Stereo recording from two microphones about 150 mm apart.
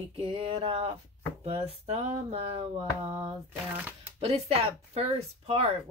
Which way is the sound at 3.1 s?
30° right (ahead or behind).